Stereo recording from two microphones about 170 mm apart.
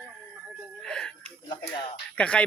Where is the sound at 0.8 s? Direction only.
5° left (ahead or behind).